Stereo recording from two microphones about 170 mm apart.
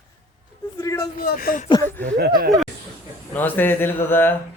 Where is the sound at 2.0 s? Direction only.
70° right (ahead or behind).